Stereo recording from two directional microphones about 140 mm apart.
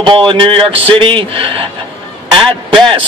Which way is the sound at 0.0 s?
35° right (ahead or behind).